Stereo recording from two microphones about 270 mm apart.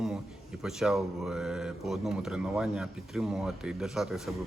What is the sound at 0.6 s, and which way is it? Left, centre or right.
Speech, centre.